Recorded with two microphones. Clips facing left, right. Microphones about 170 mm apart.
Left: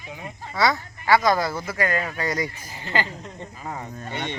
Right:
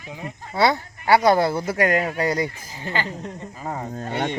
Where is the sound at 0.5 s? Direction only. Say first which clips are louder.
Right 3 dB; 30° right (ahead or behind).